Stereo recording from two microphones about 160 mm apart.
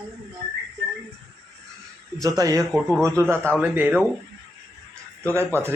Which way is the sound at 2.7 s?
5° left (ahead or behind).